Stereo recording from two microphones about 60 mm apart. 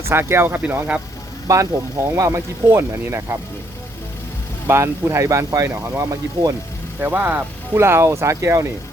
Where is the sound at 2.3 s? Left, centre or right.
Right.